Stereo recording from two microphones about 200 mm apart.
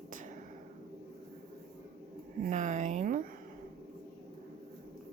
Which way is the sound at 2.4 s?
35° right (ahead or behind).